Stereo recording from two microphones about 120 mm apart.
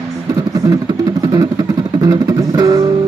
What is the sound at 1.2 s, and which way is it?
Guitar, 30° right (ahead or behind).